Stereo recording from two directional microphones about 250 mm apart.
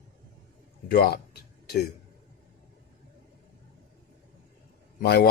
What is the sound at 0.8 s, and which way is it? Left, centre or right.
Speech, left.